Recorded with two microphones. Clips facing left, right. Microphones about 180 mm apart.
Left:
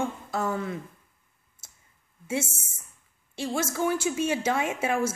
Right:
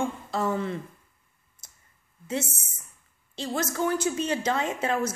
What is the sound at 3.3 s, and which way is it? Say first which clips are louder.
A woman's voice: even; 10° left (ahead or behind).